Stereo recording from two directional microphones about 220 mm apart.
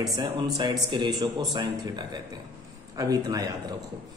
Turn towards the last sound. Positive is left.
turn(degrees=-15)  # may be behind; listen again after turning